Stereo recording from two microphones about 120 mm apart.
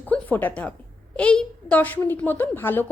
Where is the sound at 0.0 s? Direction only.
15° left (ahead or behind).